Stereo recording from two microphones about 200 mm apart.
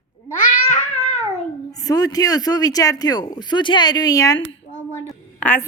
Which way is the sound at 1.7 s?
20° left (ahead or behind).